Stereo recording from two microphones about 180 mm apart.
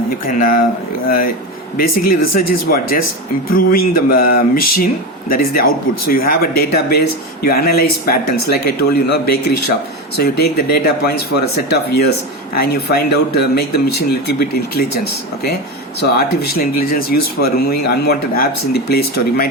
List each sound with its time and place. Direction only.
0.3 s speech: 45° left (ahead or behind)
2.0 s speech: 55° left (ahead or behind)
16.0 s speech: 60° left (ahead or behind)